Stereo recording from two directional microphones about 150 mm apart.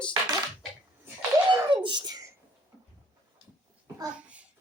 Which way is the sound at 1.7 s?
30° right (ahead or behind).